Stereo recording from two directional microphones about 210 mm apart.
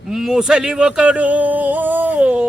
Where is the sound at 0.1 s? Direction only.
Centre (ahead or behind).